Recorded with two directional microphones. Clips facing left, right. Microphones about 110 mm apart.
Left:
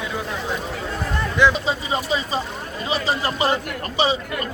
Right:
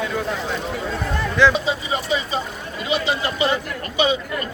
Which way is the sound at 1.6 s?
35° left (ahead or behind).